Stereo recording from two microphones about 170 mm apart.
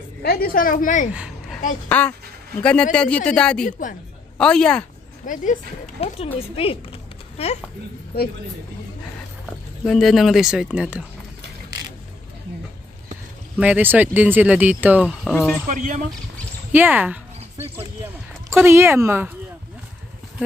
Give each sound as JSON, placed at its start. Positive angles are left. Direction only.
{"t": 0.2, "sound": "a woman's voice", "side_deg": 65}
{"t": 1.1, "sound": "a sound", "side_deg": -5}
{"t": 1.9, "sound": "speech", "side_deg": 10}
{"t": 3.6, "sound": "a woman's voice", "side_deg": 50}
{"t": 4.4, "sound": "speech", "side_deg": 5}
{"t": 5.2, "sound": "speech", "side_deg": 50}
{"t": 9.5, "sound": "speech", "side_deg": 0}
{"t": 13.6, "sound": "speech", "side_deg": -10}
{"t": 15.3, "sound": "speech", "side_deg": 10}
{"t": 15.7, "sound": "speech", "side_deg": -50}
{"t": 16.7, "sound": "speech", "side_deg": -10}
{"t": 18.5, "sound": "speech", "side_deg": -15}